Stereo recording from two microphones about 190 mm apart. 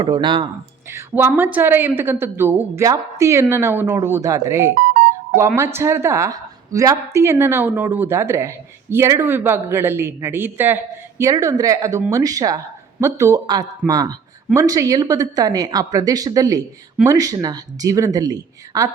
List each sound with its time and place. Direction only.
0.0 s speech: 25° right (ahead or behind)
0.9 s a woman's voice: 10° right (ahead or behind)